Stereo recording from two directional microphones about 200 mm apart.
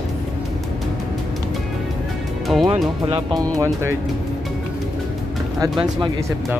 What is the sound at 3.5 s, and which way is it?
Speech, 15° right (ahead or behind).